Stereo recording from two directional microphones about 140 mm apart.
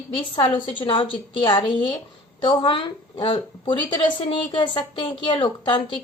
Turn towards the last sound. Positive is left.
turn(degrees=35)  # may be behind; listen again after turning